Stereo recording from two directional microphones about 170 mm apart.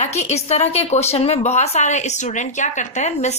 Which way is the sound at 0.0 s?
40° left (ahead or behind).